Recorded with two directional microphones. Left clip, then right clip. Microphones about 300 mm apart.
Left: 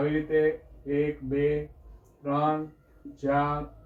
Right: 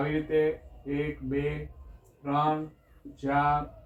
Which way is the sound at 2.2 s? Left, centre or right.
Centre.